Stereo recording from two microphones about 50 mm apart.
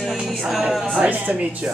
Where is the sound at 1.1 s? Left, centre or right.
Right.